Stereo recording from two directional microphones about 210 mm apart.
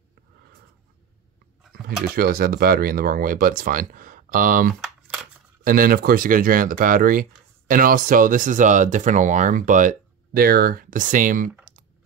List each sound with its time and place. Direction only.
2.1 s speech: 45° right (ahead or behind)
4.8 s crumpling: centre (ahead or behind)
5.6 s speech: 45° right (ahead or behind)